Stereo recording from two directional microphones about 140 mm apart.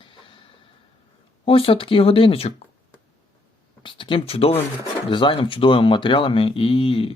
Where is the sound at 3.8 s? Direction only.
35° left (ahead or behind).